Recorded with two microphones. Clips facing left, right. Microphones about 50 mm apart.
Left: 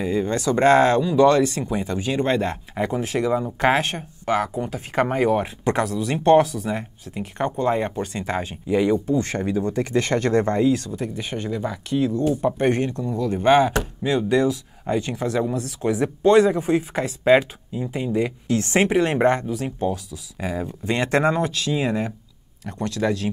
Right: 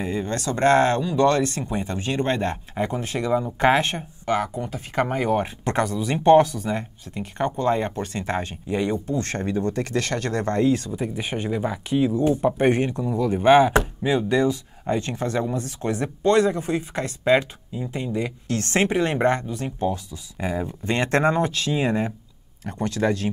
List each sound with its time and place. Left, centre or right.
0.0 s speech: centre
2.9 s speech: centre
4.3 s speech: left
5.3 s speech: centre
9.9 s speech: left
10.4 s speech: centre
10.9 s speech: centre